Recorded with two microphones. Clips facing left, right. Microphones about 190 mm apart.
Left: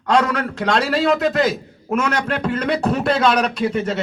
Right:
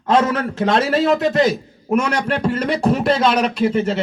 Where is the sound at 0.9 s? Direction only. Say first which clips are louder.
Right 1 dB; centre (ahead or behind).